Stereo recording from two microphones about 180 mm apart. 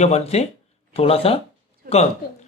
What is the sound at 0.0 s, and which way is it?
Speech, 35° left (ahead or behind).